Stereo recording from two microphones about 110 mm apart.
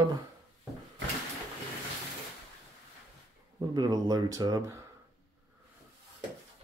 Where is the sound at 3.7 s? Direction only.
35° right (ahead or behind).